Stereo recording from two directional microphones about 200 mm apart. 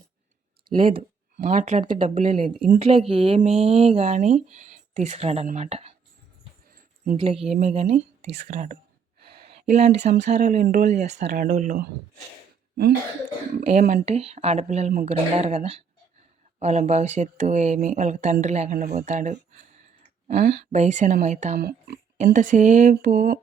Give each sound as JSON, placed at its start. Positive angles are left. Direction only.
{"t": 0.7, "sound": "speech", "side_deg": -45}
{"t": 2.6, "sound": "speech", "side_deg": -30}
{"t": 7.2, "sound": "speech", "side_deg": -30}
{"t": 9.2, "sound": "a sound", "side_deg": -50}
{"t": 9.5, "sound": "speech", "side_deg": -35}
{"t": 13.6, "sound": "speech", "side_deg": -40}
{"t": 20.3, "sound": "speech", "side_deg": -55}
{"t": 20.7, "sound": "speech", "side_deg": -35}
{"t": 21.6, "sound": "speech", "side_deg": -50}
{"t": 22.2, "sound": "speech", "side_deg": -40}